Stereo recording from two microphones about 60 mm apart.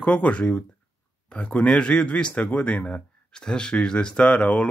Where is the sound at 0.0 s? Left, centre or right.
Centre.